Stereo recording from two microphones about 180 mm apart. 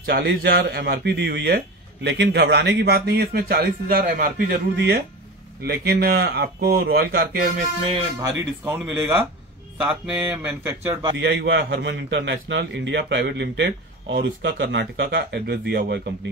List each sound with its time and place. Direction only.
0.0 s a man's voice: 65° right (ahead or behind)
2.0 s a man's voice: 75° right (ahead or behind); by 7.5 s 55° right (ahead or behind)
8.6 s speech: 10° right (ahead or behind)
11.1 s a man's voice: 85° right; by 16.0 s 70° right (ahead or behind)